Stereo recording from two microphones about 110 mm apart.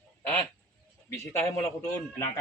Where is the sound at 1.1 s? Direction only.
25° left (ahead or behind).